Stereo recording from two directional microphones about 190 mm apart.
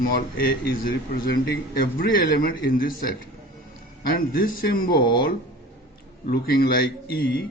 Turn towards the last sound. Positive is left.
turn(degrees=55)  # may be behind; listen again after turning